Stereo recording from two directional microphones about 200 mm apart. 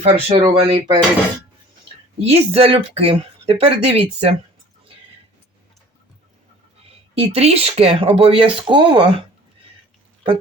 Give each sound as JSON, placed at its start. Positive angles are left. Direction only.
{"t": 0.0, "sound": "speech", "side_deg": -30}
{"t": 2.2, "sound": "speech", "side_deg": -30}
{"t": 7.1, "sound": "speech", "side_deg": -30}